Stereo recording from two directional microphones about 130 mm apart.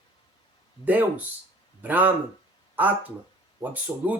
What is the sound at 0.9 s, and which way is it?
Speech, 15° right (ahead or behind).